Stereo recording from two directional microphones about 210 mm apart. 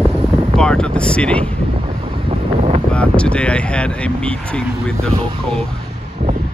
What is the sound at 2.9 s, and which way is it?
Speech, 5° left (ahead or behind).